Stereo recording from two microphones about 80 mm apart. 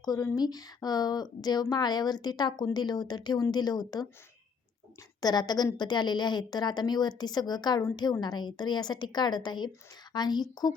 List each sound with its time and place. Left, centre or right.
0.3 s a woman's voice: left
5.2 s a woman's voice: left